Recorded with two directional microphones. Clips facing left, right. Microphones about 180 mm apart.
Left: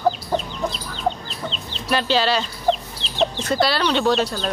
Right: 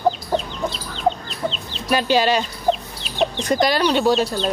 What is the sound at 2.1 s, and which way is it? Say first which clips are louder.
Speech: right 3 dB; 15° right (ahead or behind).